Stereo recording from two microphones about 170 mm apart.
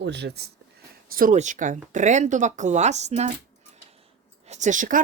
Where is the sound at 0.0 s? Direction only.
90° right.